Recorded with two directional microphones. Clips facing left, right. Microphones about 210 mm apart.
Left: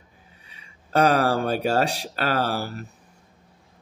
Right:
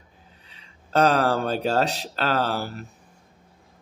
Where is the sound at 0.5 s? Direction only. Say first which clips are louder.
Left 1 dB; 10° left (ahead or behind).